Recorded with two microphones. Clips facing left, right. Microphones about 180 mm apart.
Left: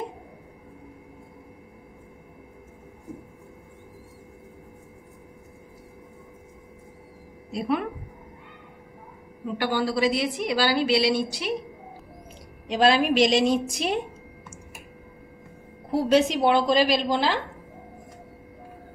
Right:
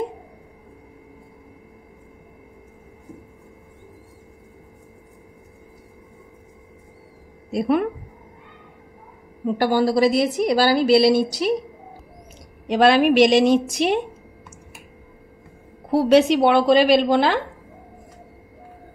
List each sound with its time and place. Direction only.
7.5 s speech: 50° right (ahead or behind)
9.6 s a woman's voice: 40° right (ahead or behind)
12.6 s a woman's voice: 55° right (ahead or behind)
15.9 s a woman's voice: 70° right (ahead or behind)